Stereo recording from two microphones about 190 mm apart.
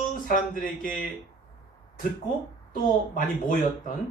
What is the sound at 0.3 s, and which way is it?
Speech, 45° left (ahead or behind).